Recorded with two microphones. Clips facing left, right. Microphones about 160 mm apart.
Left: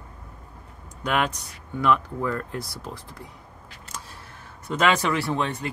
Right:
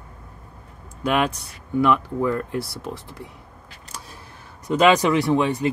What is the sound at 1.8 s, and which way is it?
Speech, 15° right (ahead or behind).